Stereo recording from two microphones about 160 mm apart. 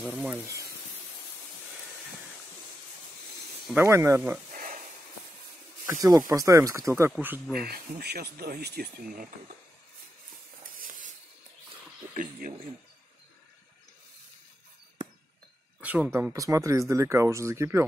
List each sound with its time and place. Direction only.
0.1 s speech: 10° right (ahead or behind)
3.7 s speech: 15° right (ahead or behind)
4.5 s a sound: 55° right (ahead or behind)
5.9 s speech: 20° right (ahead or behind)
7.6 s speech: 80° right
12.1 s speech: 55° right (ahead or behind)
15.8 s speech: 10° right (ahead or behind)